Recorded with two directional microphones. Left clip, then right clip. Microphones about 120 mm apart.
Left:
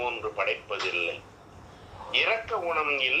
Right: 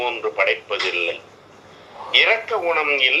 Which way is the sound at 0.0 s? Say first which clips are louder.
Right 9 dB; 45° right (ahead or behind).